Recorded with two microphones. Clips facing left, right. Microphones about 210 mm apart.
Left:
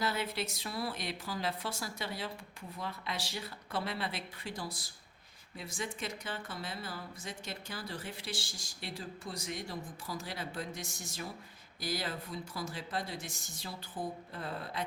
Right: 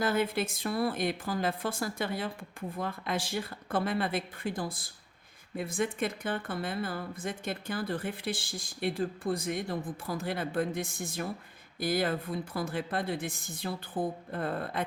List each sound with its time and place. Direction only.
0.0 s a woman's voice: 50° right (ahead or behind)